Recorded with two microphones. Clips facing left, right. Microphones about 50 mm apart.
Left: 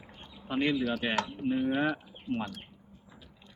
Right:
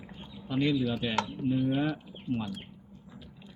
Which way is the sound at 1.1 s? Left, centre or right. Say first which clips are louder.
Right 1 dB; centre.